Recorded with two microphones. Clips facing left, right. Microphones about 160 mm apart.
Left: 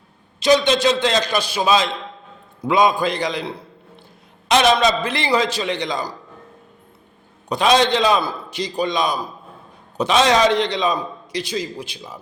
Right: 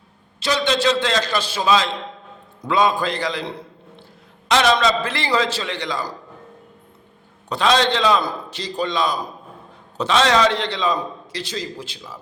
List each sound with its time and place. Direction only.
0.3 s a man's voice: 15° left (ahead or behind)
7.5 s a man's voice: 15° left (ahead or behind)